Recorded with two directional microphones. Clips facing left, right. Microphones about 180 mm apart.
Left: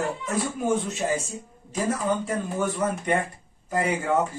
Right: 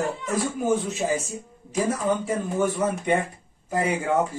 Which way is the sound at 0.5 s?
5° right (ahead or behind).